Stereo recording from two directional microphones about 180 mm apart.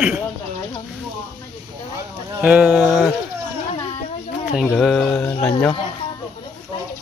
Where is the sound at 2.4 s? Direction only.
10° right (ahead or behind).